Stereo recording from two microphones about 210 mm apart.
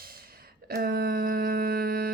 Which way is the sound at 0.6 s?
45° right (ahead or behind).